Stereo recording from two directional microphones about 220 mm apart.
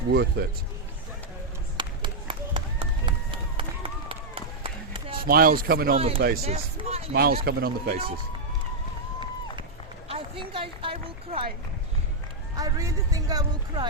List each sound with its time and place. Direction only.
0.1 s speech: 50° right (ahead or behind)
1.8 s run: 20° right (ahead or behind)
5.2 s speech: 40° right (ahead or behind)
6.0 s speech: 25° right (ahead or behind)
7.1 s speech: 45° right (ahead or behind)
10.1 s speech: 25° right (ahead or behind)
12.5 s speech: 15° right (ahead or behind)